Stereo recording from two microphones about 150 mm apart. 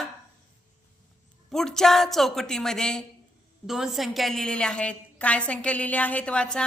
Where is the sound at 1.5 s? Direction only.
5° left (ahead or behind).